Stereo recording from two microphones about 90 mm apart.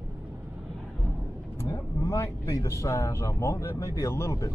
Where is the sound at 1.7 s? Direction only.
40° left (ahead or behind).